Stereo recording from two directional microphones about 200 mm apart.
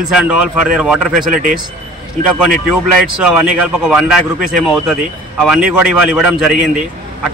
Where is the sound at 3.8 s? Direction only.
5° right (ahead or behind).